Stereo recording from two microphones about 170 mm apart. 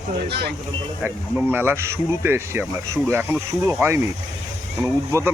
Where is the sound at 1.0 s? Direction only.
10° right (ahead or behind).